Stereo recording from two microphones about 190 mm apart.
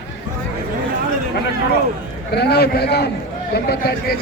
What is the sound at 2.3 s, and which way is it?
A man's voice, 60° left (ahead or behind).